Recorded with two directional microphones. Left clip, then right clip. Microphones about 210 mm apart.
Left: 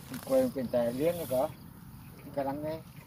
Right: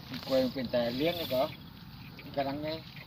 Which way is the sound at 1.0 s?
30° left (ahead or behind).